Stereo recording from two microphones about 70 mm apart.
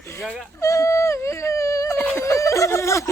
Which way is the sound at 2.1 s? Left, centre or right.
Left.